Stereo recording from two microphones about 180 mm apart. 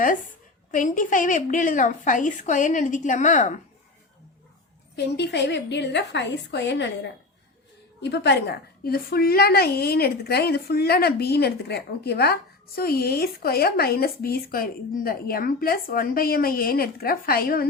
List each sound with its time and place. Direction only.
0.7 s a woman's voice: 45° left (ahead or behind)
4.9 s a woman's voice: 70° left (ahead or behind)